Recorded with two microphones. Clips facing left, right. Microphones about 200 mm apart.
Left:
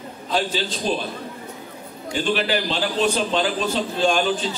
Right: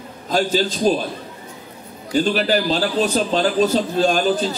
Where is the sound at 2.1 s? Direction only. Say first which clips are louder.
Right 4 dB; 40° right (ahead or behind).